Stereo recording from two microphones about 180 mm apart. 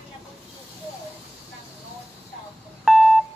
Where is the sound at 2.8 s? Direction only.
Centre (ahead or behind).